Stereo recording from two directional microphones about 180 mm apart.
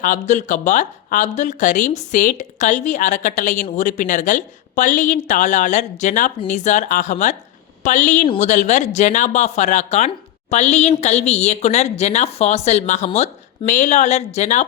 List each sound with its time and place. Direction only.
0.0 s a woman's voice: 45° left (ahead or behind)